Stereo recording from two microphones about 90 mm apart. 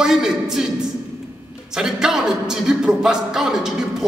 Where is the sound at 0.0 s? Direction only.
5° right (ahead or behind).